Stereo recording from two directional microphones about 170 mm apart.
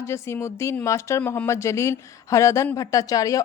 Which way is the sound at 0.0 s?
15° left (ahead or behind).